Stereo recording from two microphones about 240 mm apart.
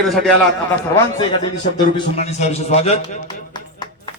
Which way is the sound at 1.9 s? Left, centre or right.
Left.